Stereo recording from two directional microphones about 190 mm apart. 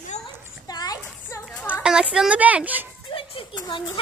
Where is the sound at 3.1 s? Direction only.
30° left (ahead or behind).